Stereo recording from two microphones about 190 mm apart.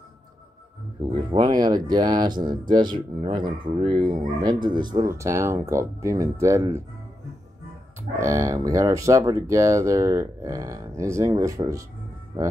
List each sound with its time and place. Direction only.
1.1 s speech: 25° right (ahead or behind)
8.2 s speech: 15° right (ahead or behind)